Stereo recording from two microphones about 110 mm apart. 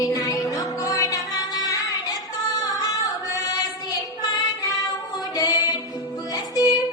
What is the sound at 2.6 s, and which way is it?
Female singing, 35° left (ahead or behind).